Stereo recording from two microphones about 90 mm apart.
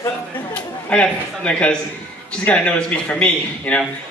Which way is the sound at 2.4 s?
15° left (ahead or behind).